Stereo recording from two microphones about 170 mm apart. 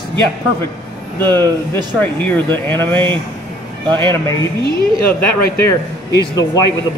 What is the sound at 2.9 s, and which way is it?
Speech, 30° right (ahead or behind).